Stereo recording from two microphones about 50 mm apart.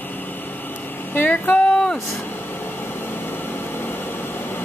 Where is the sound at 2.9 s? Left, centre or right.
Left.